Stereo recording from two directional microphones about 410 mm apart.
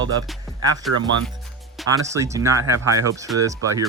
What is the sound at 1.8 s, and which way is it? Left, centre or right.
Speech, centre.